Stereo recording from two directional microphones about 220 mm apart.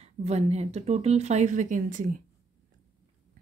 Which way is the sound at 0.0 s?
30° right (ahead or behind).